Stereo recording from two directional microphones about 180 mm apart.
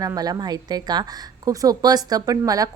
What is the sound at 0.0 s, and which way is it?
A woman's voice, 20° right (ahead or behind).